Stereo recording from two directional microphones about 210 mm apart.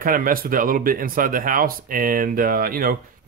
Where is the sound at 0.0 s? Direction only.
40° right (ahead or behind).